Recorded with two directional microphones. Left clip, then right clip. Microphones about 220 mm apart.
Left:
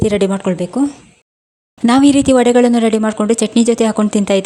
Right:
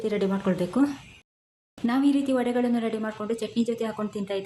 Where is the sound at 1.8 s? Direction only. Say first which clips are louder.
Left 13 dB; 45° left (ahead or behind).